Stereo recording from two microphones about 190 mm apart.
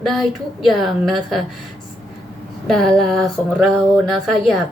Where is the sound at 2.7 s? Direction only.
Centre (ahead or behind).